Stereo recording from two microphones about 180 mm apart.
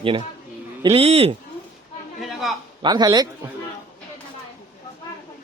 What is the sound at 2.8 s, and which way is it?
Speech, 25° right (ahead or behind).